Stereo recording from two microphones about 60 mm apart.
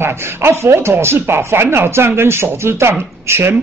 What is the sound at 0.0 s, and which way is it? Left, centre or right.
Speech, right.